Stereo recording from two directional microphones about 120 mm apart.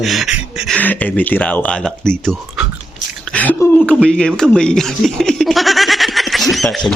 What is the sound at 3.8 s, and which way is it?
Speech, 5° left (ahead or behind).